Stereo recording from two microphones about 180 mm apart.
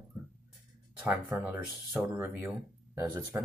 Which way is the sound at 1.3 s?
10° right (ahead or behind).